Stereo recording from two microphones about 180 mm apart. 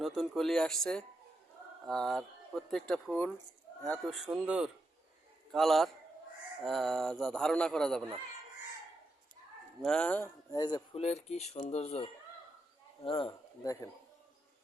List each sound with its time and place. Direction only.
0.0 s a man's voice: centre (ahead or behind)
9.8 s speech: 5° left (ahead or behind)
10.5 s speech: 20° left (ahead or behind)
11.0 s speech: 40° left (ahead or behind)
13.1 s speech: 30° left (ahead or behind)